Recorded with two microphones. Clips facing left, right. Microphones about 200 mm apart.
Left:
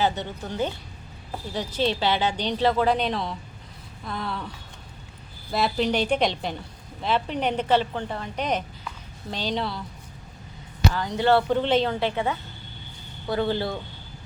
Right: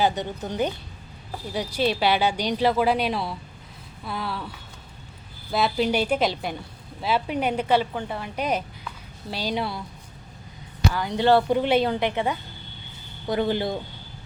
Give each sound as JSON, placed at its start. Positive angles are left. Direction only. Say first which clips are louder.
{"t": 0.0, "sound": "a woman's voice", "louder": "right 2 dB", "side_deg": -15}
{"t": 10.9, "sound": "a woman's voice", "louder": "right 2 dB", "side_deg": -10}